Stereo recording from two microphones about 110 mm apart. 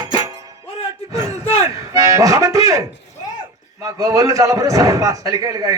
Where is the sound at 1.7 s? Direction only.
30° right (ahead or behind).